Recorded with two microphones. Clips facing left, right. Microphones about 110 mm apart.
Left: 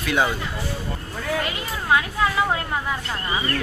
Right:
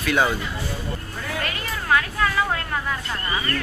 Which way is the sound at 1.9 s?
15° left (ahead or behind).